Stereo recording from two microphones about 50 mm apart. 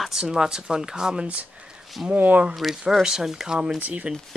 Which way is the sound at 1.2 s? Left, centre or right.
Right.